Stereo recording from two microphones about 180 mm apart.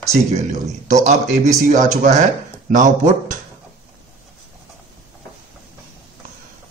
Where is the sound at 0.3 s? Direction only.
40° right (ahead or behind).